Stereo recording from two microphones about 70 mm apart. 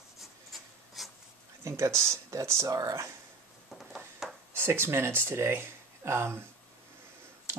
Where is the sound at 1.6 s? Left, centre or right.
Right.